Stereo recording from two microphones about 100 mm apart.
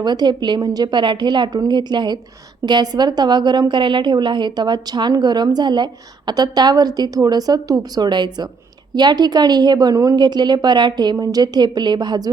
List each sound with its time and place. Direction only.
0.0 s a woman's voice: 45° right (ahead or behind)